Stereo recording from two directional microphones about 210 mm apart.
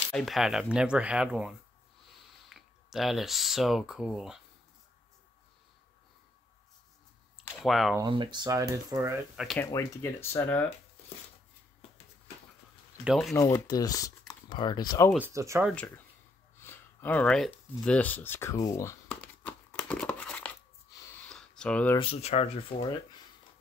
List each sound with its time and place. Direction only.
0.1 s speech: centre (ahead or behind)
7.4 s speech: centre (ahead or behind)
8.0 s speech: 20° right (ahead or behind)
9.4 s speech: centre (ahead or behind)
9.7 s speech: 15° left (ahead or behind)
13.0 s speech: centre (ahead or behind)
13.3 s speech: 15° left (ahead or behind)
15.1 s speech: 10° right (ahead or behind)
16.6 s a sound: 10° left (ahead or behind)
21.9 s speech: 25° left (ahead or behind)